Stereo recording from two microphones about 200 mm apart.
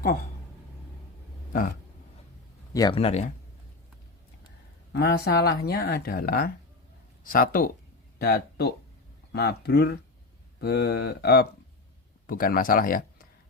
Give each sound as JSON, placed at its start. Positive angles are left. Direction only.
{"t": 2.7, "sound": "speech", "side_deg": 20}
{"t": 3.0, "sound": "speech", "side_deg": 30}
{"t": 4.9, "sound": "speech", "side_deg": 55}